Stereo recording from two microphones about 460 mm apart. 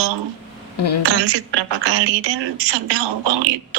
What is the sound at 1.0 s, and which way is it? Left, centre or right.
A woman's voice, right.